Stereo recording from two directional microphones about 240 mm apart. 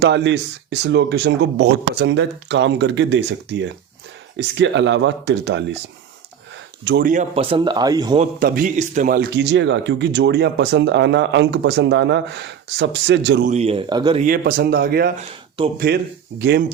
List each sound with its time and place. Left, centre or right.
0.0 s a man's voice: right
6.8 s speech: right; by 8.2 s centre
8.2 s a man's voice: right
13.5 s speech: right
14.3 s a man's voice: right